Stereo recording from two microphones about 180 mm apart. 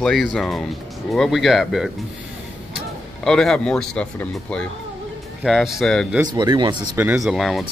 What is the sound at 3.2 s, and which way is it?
Speech, 5° left (ahead or behind).